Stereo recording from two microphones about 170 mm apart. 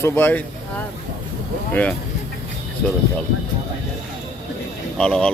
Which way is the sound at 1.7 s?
10° left (ahead or behind).